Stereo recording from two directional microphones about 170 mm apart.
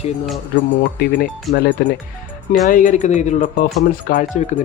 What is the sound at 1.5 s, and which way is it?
Speech, centre (ahead or behind).